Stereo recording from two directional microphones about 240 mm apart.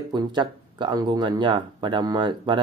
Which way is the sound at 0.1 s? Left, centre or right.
Centre.